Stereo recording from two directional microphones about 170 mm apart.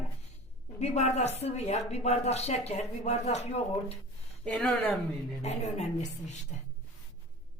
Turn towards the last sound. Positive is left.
turn(degrees=45)  # may be behind; listen again after turning